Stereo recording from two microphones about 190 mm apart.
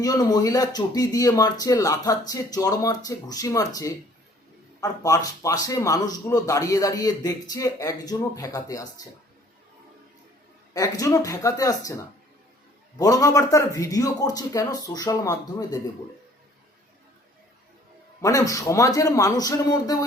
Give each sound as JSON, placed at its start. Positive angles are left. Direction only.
{"t": 0.0, "sound": "speech", "side_deg": 20}
{"t": 4.8, "sound": "speech", "side_deg": 20}
{"t": 10.8, "sound": "speech", "side_deg": 20}
{"t": 13.0, "sound": "speech", "side_deg": 20}
{"t": 18.2, "sound": "speech", "side_deg": 15}